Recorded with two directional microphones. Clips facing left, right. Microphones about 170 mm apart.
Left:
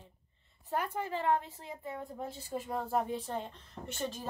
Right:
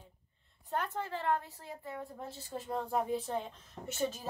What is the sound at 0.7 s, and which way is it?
A woman's voice, 10° left (ahead or behind).